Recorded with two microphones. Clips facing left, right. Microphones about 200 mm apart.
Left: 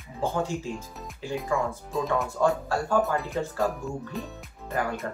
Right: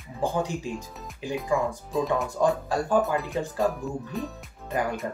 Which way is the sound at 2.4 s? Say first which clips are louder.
Right 1 dB; 15° right (ahead or behind).